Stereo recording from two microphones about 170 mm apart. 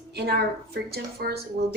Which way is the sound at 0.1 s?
70° right (ahead or behind).